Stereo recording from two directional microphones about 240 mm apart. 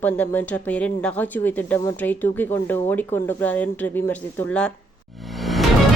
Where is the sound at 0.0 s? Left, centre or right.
Centre.